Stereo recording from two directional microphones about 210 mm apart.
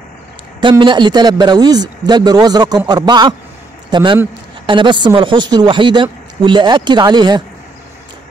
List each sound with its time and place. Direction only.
0.6 s a man's voice: 20° right (ahead or behind)